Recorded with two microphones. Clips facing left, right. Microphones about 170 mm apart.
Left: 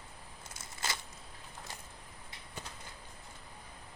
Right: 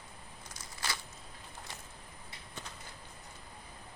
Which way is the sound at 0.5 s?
25° left (ahead or behind).